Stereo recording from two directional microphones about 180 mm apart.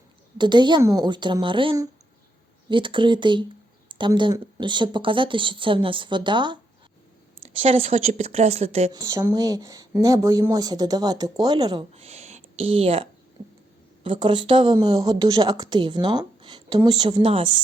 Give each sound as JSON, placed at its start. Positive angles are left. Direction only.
{"t": 0.3, "sound": "speech", "side_deg": -25}
{"t": 8.9, "sound": "speech", "side_deg": -20}